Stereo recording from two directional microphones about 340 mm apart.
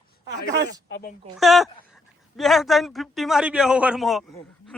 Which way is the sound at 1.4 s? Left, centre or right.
Centre.